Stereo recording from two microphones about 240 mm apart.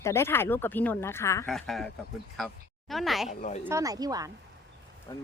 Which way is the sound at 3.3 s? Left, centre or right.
Left.